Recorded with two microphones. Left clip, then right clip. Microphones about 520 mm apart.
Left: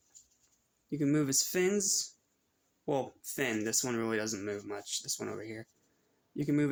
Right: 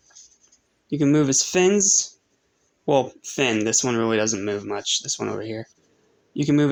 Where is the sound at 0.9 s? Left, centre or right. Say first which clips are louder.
Right 12 dB; left.